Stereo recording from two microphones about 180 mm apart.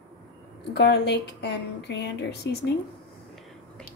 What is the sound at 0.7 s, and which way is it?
A woman's voice, 70° left (ahead or behind).